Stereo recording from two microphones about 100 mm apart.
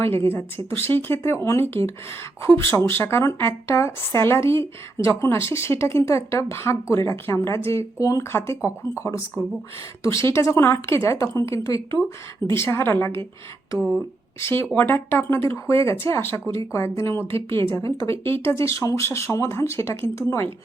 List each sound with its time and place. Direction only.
0.0 s a woman's voice: 25° left (ahead or behind)
14.4 s a woman's voice: 25° left (ahead or behind)